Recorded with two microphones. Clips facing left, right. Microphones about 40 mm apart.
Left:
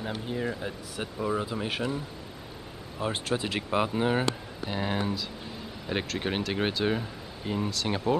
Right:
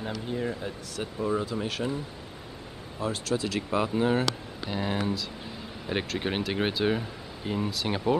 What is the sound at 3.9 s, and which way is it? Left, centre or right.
Speech, centre.